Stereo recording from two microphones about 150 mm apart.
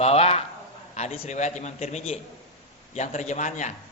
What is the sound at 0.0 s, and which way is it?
A man's voice, 40° left (ahead or behind).